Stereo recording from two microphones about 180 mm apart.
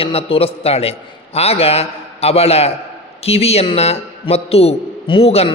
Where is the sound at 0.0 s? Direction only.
30° left (ahead or behind).